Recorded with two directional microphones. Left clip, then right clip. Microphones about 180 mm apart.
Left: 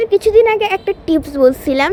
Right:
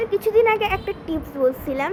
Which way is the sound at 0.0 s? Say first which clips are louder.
Left 7 dB; 45° left (ahead or behind).